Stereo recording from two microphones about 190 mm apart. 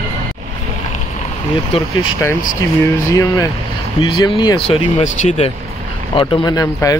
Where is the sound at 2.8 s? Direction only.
15° left (ahead or behind); by 5.5 s 35° left (ahead or behind).